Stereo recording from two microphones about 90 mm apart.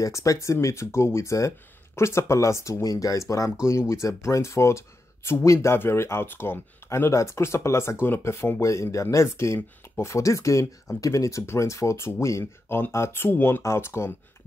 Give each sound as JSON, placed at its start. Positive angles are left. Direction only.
{"t": 0.0, "sound": "speech", "side_deg": 40}